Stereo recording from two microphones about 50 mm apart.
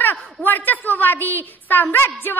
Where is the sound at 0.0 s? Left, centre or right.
Left.